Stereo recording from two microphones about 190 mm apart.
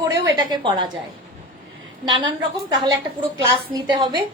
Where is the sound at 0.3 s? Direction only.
20° right (ahead or behind).